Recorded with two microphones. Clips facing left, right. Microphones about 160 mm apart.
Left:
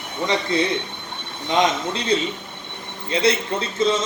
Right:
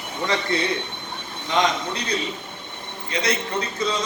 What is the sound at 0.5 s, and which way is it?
A man's voice, 20° left (ahead or behind).